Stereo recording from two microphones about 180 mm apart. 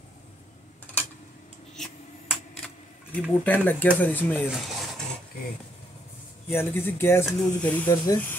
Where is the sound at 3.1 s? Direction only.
10° left (ahead or behind).